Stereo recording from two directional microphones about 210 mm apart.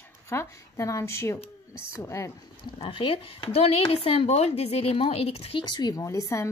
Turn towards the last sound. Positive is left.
turn(degrees=15)  # may be behind; listen again after turning